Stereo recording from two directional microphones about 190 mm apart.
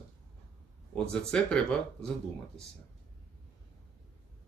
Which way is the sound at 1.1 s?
5° left (ahead or behind).